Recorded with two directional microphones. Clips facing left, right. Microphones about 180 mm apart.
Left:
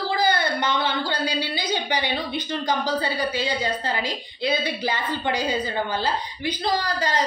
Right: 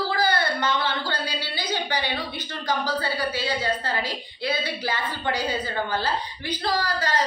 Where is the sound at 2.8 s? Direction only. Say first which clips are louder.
Left 2 dB; 20° left (ahead or behind).